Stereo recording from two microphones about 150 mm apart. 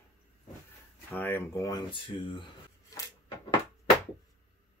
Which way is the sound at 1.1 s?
15° left (ahead or behind).